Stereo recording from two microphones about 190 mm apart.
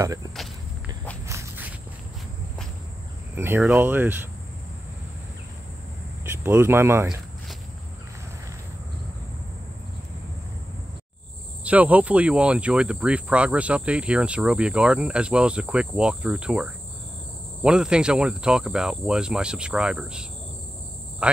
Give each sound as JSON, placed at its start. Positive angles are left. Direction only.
{"t": 0.0, "sound": "speech", "side_deg": -20}
{"t": 1.2, "sound": "walk", "side_deg": -15}
{"t": 3.3, "sound": "speech", "side_deg": -10}
{"t": 6.4, "sound": "speech", "side_deg": -10}
{"t": 11.6, "sound": "speech", "side_deg": -10}